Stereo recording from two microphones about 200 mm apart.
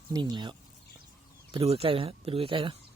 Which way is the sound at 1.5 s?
30° right (ahead or behind).